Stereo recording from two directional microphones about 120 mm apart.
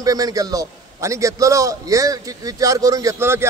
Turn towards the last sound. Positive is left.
turn(degrees=-20)  # may be behind; listen again after turning